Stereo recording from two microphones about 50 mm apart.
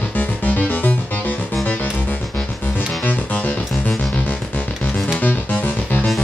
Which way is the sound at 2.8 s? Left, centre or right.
Left.